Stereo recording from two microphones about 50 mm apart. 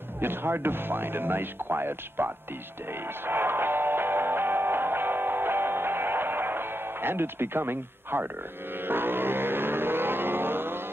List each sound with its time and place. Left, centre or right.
0.2 s speech: right
2.9 s music: right
8.7 s a sound: right